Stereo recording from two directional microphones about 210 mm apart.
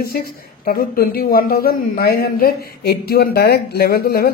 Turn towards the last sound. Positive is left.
turn(degrees=45)  # may be behind; listen again after turning